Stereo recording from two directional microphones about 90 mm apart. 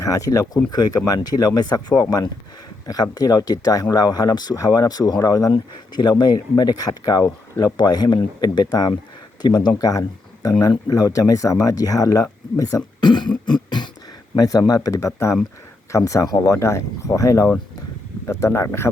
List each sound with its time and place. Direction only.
0.0 s speech: 40° left (ahead or behind)
5.9 s speech: 55° left (ahead or behind); by 12.8 s 40° left (ahead or behind)
13.0 s throat clearing: 55° left (ahead or behind)
13.4 s beatboxing: 55° left (ahead or behind)
14.3 s speech: 45° left (ahead or behind)